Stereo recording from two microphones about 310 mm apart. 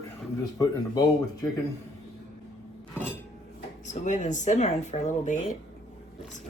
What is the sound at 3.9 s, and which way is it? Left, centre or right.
Speech, left.